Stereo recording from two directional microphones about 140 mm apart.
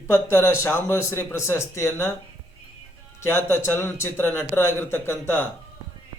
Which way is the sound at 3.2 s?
15° left (ahead or behind).